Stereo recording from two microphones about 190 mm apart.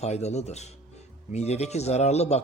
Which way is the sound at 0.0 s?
35° left (ahead or behind).